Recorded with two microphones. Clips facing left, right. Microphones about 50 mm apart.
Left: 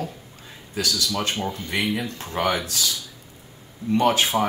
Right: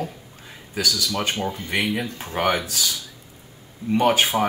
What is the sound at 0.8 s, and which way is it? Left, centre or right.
Speech, centre.